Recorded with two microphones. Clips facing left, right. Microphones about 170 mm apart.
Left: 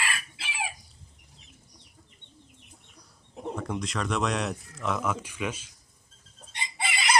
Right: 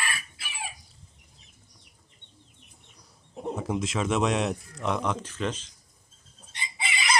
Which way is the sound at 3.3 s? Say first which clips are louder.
Right 3 dB; 5° right (ahead or behind).